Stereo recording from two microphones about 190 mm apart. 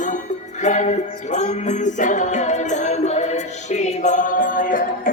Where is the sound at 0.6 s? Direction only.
40° left (ahead or behind).